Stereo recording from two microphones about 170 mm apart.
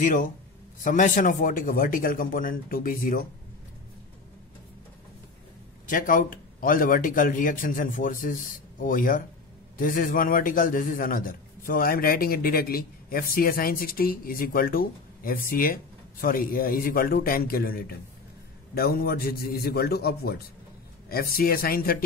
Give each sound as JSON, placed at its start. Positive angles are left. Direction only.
{"t": 0.0, "sound": "a man's voice", "side_deg": 50}
{"t": 5.9, "sound": "a man's voice", "side_deg": 50}